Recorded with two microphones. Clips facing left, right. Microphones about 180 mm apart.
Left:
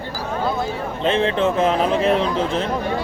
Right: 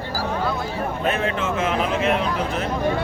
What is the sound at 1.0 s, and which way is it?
A man's voice, 30° left (ahead or behind).